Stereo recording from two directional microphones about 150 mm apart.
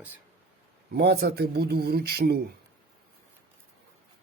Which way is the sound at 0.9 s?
90° right.